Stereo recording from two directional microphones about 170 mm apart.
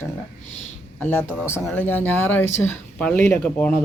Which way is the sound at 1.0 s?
10° left (ahead or behind).